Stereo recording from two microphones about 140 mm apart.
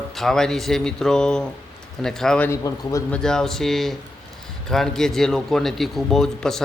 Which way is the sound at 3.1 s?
5° left (ahead or behind).